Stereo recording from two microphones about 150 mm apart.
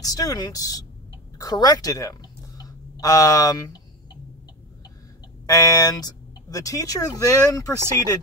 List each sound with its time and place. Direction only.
0.0 s speech: 25° left (ahead or behind)
5.5 s speech: 25° left (ahead or behind)